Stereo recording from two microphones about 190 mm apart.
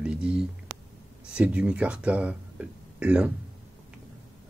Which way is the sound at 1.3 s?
5° right (ahead or behind).